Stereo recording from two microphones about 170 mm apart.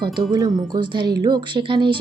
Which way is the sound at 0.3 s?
25° right (ahead or behind).